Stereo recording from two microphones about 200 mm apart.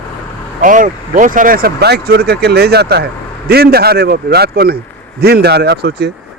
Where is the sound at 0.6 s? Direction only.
40° right (ahead or behind).